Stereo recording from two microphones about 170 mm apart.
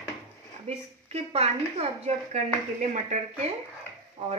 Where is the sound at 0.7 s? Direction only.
40° right (ahead or behind).